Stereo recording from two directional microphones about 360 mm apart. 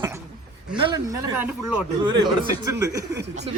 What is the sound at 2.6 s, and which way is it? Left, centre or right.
Speech, centre.